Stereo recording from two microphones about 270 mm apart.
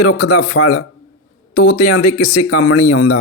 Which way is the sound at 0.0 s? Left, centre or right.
Left.